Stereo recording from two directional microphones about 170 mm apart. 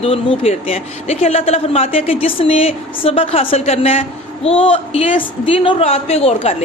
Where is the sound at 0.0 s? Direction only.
35° left (ahead or behind).